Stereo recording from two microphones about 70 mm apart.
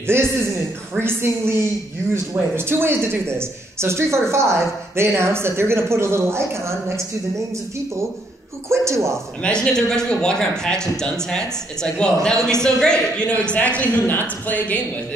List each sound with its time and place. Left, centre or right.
0.0 s a man's voice: right
8.6 s speech: right
9.4 s speech: centre